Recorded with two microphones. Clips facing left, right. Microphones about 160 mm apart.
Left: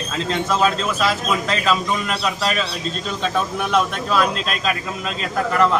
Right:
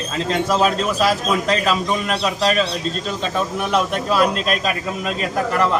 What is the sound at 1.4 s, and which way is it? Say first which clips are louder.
Speech: right 1 dB; 35° right (ahead or behind).